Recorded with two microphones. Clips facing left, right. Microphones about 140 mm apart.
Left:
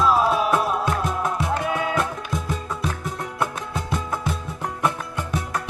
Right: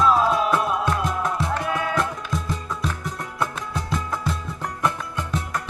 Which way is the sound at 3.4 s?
10° left (ahead or behind).